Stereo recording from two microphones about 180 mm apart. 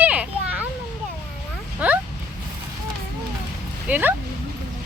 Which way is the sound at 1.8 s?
10° right (ahead or behind).